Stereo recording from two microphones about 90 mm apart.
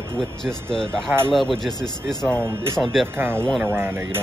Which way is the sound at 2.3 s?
25° right (ahead or behind).